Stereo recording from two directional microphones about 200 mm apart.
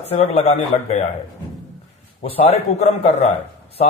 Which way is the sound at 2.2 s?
30° left (ahead or behind).